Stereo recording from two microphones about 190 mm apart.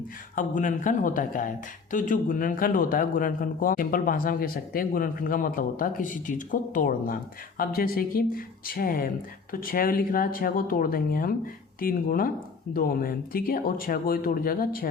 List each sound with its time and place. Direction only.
0.3 s speech: 45° left (ahead or behind)